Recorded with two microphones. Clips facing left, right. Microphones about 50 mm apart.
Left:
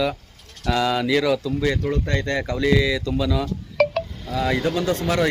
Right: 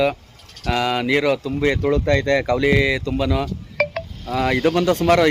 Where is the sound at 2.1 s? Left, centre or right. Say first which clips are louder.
Right 7 dB; right.